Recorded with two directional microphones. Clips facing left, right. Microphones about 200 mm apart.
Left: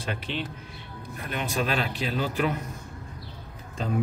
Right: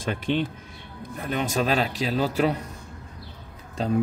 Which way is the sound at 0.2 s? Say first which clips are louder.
Right 8 dB; 50° right (ahead or behind).